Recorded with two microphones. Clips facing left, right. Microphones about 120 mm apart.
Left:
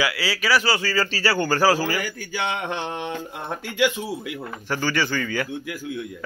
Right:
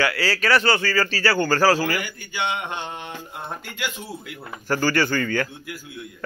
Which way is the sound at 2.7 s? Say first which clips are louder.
Left 4 dB; 90° left.